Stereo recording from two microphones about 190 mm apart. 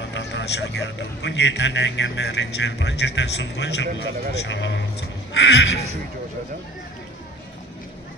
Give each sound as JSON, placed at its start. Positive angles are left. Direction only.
{"t": 0.1, "sound": "a man's voice", "side_deg": 65}